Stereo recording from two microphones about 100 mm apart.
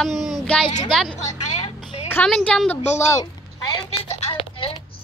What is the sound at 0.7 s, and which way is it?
Speech, 50° left (ahead or behind).